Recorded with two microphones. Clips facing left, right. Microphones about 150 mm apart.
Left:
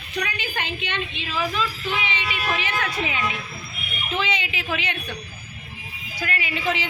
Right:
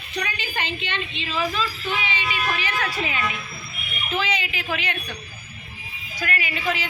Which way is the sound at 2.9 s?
20° left (ahead or behind).